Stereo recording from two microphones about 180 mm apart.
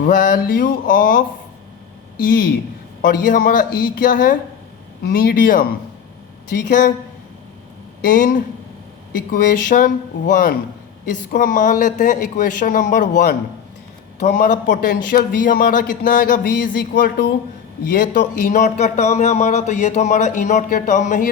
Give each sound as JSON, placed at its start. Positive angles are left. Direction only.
{"t": 0.0, "sound": "speech", "side_deg": 50}
{"t": 2.2, "sound": "speech", "side_deg": 55}
{"t": 6.7, "sound": "speech", "side_deg": 45}
{"t": 8.0, "sound": "speech", "side_deg": 50}
{"t": 17.9, "sound": "a man's voice", "side_deg": 45}